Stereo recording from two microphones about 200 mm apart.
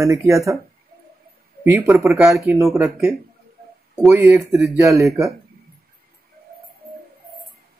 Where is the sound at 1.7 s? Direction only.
5° right (ahead or behind).